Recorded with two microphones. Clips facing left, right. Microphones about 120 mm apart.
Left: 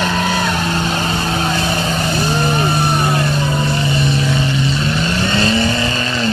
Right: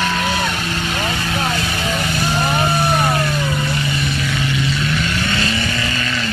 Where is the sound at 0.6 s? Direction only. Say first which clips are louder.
Left 4 dB; 35° left (ahead or behind).